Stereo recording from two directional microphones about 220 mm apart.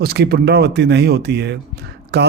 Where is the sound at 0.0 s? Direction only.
45° right (ahead or behind).